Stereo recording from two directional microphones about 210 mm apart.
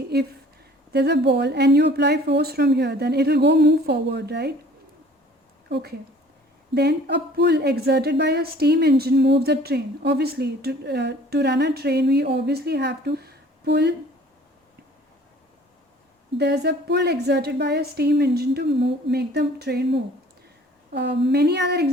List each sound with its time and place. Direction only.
0.9 s a woman's voice: 50° right (ahead or behind)
5.6 s a woman's voice: 50° right (ahead or behind)
16.4 s a woman's voice: 50° right (ahead or behind)